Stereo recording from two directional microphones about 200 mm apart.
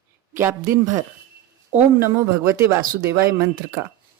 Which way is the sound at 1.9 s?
10° right (ahead or behind).